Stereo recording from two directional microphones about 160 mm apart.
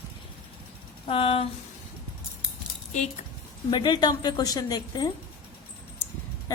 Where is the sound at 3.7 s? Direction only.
30° left (ahead or behind).